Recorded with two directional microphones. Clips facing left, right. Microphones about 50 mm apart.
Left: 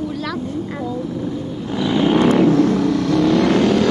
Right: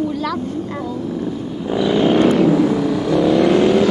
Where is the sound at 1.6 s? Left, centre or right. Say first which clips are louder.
Right 2 dB; centre.